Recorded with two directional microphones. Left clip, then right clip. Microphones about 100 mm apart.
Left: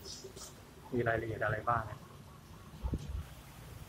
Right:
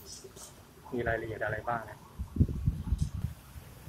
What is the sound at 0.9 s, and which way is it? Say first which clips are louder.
Speech: right 1 dB; 20° right (ahead or behind).